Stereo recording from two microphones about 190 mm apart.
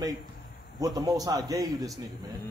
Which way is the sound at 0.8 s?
20° right (ahead or behind).